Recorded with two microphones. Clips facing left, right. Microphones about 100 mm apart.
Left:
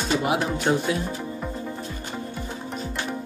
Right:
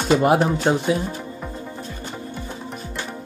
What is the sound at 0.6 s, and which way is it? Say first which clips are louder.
Speech: right 3 dB; 30° right (ahead or behind).